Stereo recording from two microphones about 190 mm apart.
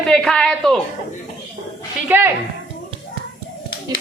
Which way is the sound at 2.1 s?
10° right (ahead or behind).